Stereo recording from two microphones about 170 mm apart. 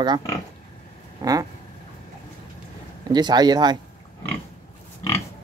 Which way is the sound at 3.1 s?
25° right (ahead or behind).